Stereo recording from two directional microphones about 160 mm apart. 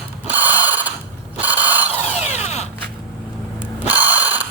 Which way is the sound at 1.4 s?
10° right (ahead or behind).